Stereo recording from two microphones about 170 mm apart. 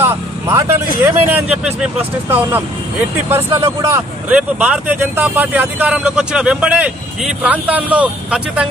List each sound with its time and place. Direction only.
0.0 s vehicle: 15° right (ahead or behind)
1.0 s speech: 10° right (ahead or behind)
3.3 s speech: 15° right (ahead or behind)